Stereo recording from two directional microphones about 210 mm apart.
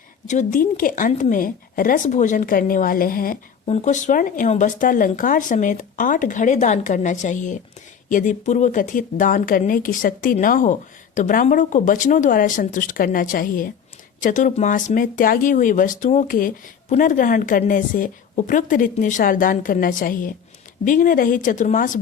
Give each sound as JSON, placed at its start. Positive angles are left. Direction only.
{"t": 0.3, "sound": "a woman's voice", "side_deg": 35}
{"t": 3.7, "sound": "a woman's voice", "side_deg": 35}